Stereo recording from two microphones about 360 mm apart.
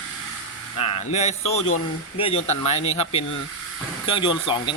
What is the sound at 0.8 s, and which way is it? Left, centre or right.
Speech, centre.